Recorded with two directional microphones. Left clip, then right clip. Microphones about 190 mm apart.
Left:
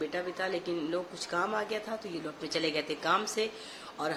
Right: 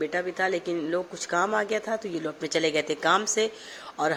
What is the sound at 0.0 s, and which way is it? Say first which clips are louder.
A man's voice: right 7 dB; 35° right (ahead or behind).